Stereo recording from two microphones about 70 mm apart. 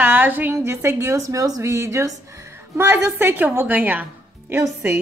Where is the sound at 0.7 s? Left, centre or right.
Right.